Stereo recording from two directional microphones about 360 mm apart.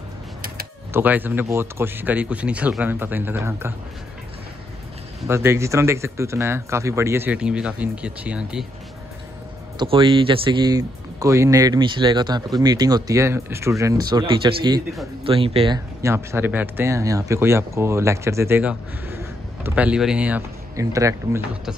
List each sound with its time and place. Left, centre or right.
0.9 s speech: centre
5.2 s speech: centre
9.8 s speech: centre